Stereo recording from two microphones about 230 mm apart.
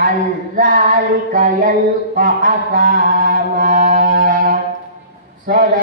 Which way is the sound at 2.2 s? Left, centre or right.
Right.